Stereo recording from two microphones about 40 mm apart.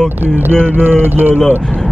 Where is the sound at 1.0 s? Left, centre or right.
Right.